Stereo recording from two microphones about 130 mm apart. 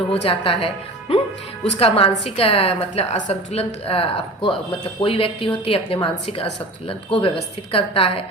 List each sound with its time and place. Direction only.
0.1 s a woman's voice: 50° left (ahead or behind)